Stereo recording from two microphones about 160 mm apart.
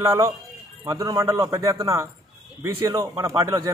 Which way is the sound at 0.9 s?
20° right (ahead or behind).